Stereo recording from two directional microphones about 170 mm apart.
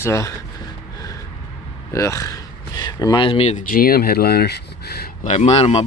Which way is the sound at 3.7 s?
60° left (ahead or behind).